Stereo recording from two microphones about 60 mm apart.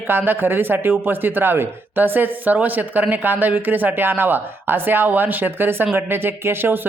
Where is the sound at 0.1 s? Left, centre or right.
Right.